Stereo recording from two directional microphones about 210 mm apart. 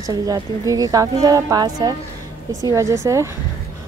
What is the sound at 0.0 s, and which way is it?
A woman's voice, 15° right (ahead or behind).